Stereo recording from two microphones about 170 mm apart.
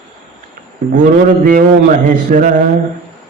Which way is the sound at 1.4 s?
50° right (ahead or behind).